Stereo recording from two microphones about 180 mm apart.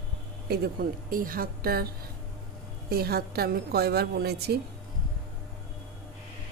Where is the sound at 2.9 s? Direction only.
60° right (ahead or behind).